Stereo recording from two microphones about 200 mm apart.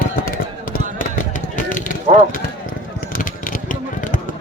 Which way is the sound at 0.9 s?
40° left (ahead or behind).